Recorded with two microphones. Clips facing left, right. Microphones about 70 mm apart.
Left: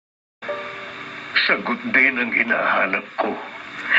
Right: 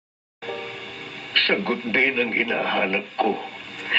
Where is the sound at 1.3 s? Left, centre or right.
Left.